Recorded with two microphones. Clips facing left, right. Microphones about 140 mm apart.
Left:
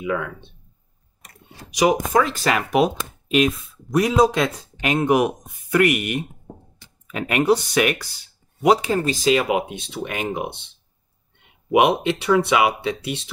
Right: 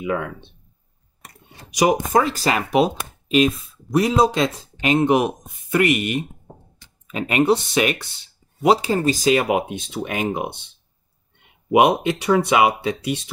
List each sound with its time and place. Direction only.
0.0 s speech: 40° right (ahead or behind)
1.8 s speech: 40° right (ahead or behind)
3.9 s speech: 30° right (ahead or behind)
11.7 s speech: 45° right (ahead or behind)